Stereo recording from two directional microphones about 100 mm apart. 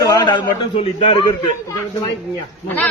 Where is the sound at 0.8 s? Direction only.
75° left (ahead or behind).